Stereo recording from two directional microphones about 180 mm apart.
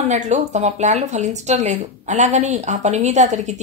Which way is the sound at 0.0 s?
40° right (ahead or behind).